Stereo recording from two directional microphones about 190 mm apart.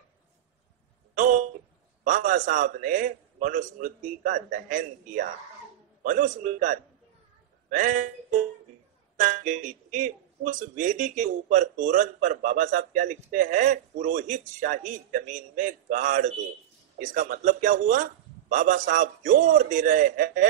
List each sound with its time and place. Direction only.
2.0 s speech: 45° right (ahead or behind)
9.1 s speech: 45° right (ahead or behind)